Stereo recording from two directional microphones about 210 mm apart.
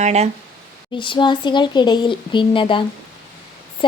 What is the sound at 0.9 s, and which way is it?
Speech, 25° left (ahead or behind).